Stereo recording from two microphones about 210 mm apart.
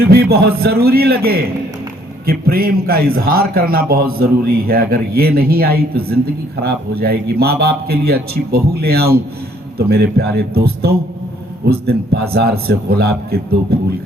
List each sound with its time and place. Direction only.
0.0 s a man's voice: 50° right (ahead or behind)